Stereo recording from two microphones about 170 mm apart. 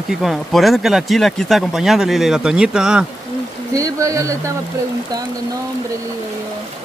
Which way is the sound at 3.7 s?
20° right (ahead or behind).